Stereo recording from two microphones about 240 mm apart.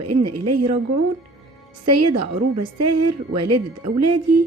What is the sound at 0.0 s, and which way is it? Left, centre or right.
Speech, right.